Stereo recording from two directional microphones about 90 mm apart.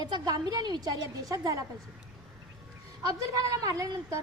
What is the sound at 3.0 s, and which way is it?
A woman's voice, 40° right (ahead or behind).